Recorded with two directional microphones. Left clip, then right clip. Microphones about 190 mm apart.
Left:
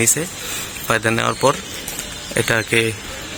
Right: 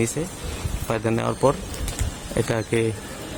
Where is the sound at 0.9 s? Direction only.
5° right (ahead or behind).